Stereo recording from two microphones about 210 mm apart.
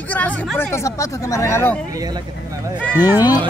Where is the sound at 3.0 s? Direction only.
20° left (ahead or behind).